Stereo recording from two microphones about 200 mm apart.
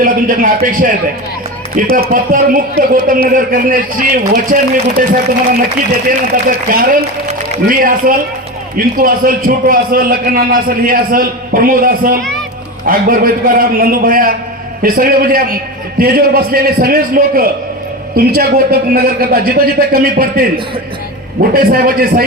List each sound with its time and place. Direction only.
0.0 s speech: 45° right (ahead or behind)
2.0 s a man's voice: 45° right (ahead or behind)
21.5 s a man's voice: 50° right (ahead or behind)